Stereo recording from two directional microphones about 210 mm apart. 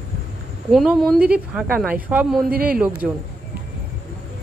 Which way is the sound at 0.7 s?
Centre (ahead or behind).